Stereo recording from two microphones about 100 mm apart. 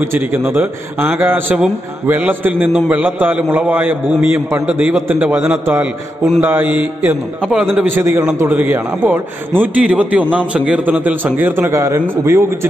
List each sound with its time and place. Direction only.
0.0 s a man's voice: 20° right (ahead or behind)